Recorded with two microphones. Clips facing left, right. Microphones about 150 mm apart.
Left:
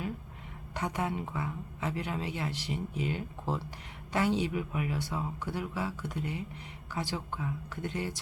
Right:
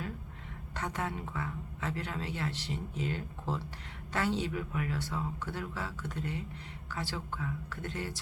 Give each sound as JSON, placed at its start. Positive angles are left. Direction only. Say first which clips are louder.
{"t": 0.8, "sound": "speech", "louder": "left 3 dB", "side_deg": 15}